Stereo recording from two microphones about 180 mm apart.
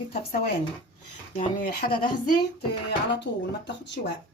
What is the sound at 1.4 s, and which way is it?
Speech, 50° left (ahead or behind).